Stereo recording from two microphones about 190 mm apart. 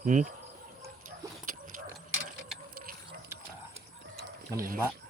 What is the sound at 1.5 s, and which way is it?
Clip-clop, 45° right (ahead or behind).